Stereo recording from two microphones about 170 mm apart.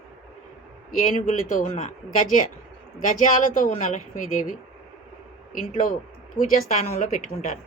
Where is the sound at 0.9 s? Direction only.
55° left (ahead or behind).